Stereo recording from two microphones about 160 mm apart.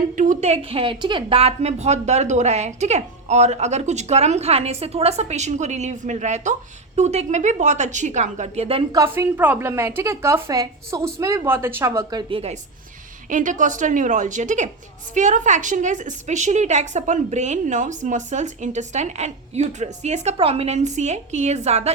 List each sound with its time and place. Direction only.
0.2 s a woman's voice: 50° right (ahead or behind)
9.0 s a woman's voice: 15° right (ahead or behind)
12.1 s a woman's voice: 35° right (ahead or behind)
13.3 s a woman's voice: 50° right (ahead or behind)